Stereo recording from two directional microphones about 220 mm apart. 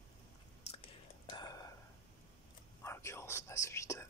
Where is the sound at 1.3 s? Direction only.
15° left (ahead or behind).